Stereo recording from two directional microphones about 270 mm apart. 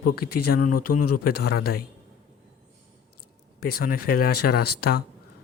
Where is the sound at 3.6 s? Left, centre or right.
Left.